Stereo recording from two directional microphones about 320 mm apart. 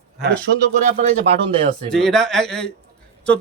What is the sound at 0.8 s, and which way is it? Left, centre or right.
Speech, right.